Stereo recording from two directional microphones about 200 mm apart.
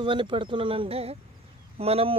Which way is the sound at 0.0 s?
25° right (ahead or behind).